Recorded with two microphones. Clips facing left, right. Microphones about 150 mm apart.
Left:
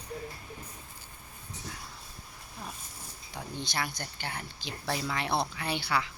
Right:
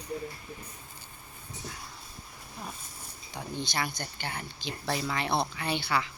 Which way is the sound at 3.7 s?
5° left (ahead or behind).